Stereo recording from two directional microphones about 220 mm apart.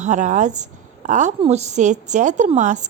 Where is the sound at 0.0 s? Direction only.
35° right (ahead or behind).